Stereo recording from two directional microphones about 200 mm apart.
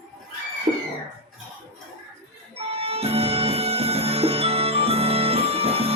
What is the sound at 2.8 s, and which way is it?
Music, 30° right (ahead or behind).